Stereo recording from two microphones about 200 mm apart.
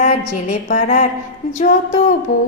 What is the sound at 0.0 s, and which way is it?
A woman's voice, 40° left (ahead or behind).